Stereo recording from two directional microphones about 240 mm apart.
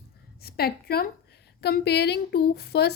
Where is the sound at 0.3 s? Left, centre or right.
Left.